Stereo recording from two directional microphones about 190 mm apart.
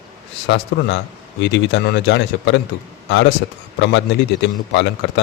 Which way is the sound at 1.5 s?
70° left (ahead or behind).